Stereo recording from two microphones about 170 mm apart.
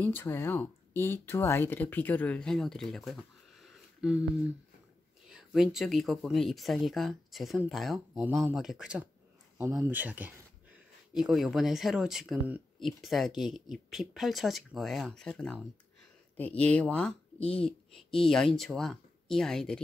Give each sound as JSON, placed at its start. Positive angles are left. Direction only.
{"t": 0.0, "sound": "speech", "side_deg": 10}
{"t": 5.3, "sound": "speech", "side_deg": -5}
{"t": 17.4, "sound": "speech", "side_deg": 35}
{"t": 17.6, "sound": "speech", "side_deg": 0}